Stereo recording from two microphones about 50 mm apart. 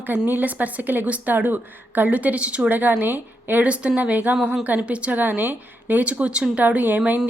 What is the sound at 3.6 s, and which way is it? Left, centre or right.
A woman's voice, right.